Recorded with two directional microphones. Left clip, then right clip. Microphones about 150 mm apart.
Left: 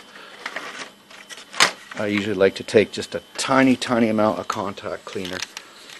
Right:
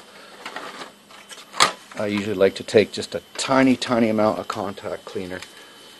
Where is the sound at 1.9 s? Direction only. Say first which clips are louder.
Left 1 dB; 10° left (ahead or behind).